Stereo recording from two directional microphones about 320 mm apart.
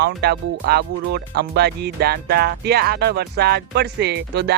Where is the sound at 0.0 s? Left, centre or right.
Right.